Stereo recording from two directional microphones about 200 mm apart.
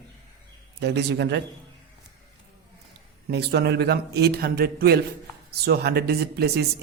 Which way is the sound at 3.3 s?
55° right (ahead or behind).